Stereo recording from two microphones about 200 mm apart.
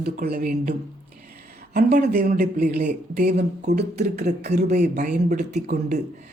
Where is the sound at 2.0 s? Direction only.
55° right (ahead or behind).